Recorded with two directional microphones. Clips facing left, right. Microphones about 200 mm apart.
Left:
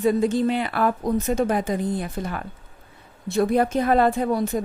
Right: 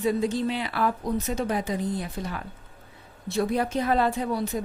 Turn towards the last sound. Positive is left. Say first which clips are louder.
# left 5 dB
turn(degrees=50)  # may be behind; listen again after turning